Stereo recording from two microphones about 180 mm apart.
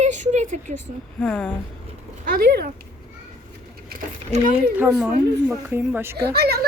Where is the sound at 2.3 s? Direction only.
60° right (ahead or behind).